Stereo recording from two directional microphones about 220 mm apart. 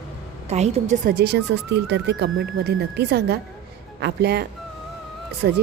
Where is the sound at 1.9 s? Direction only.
50° right (ahead or behind).